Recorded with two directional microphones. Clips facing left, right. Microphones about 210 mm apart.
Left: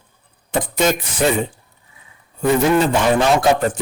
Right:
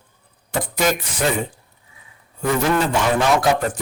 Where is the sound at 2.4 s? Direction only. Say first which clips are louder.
Left 4 dB; 20° left (ahead or behind).